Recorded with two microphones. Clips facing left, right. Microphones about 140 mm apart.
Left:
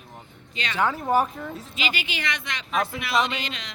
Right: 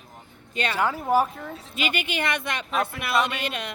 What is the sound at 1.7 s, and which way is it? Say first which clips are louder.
Speech: right 4 dB; 55° right (ahead or behind).